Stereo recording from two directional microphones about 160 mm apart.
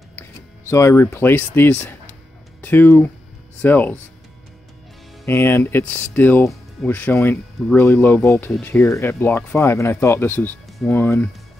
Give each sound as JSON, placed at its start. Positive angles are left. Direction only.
{"t": 0.7, "sound": "speech", "side_deg": 15}
{"t": 5.2, "sound": "speech", "side_deg": 15}